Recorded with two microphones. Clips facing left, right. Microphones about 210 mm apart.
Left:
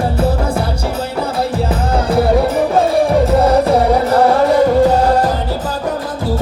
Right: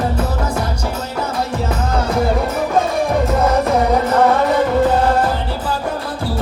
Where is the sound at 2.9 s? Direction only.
35° left (ahead or behind).